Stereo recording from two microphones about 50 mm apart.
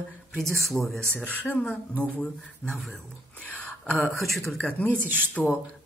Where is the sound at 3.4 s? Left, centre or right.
Left.